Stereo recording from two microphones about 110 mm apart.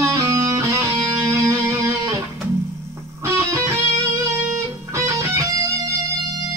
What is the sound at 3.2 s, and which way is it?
Music, 20° right (ahead or behind).